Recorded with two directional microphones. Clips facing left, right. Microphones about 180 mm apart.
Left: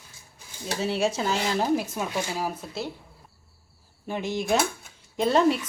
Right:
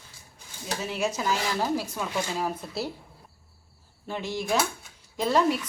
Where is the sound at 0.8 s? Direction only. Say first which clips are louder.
Left 3 dB; 30° left (ahead or behind).